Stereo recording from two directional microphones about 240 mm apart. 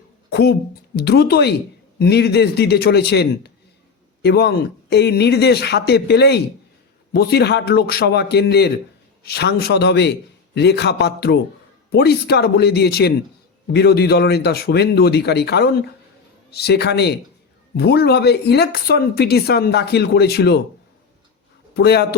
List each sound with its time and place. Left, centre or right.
0.3 s a sound: left
0.9 s speech: left
21.8 s speech: left